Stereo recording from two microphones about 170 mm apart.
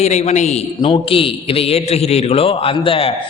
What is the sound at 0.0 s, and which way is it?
A man's voice, 40° left (ahead or behind).